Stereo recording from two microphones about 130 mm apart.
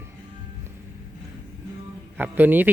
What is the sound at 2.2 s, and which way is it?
Speech, 15° right (ahead or behind).